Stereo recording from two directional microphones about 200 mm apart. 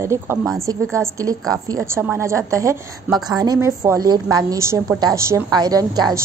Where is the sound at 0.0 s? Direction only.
10° right (ahead or behind).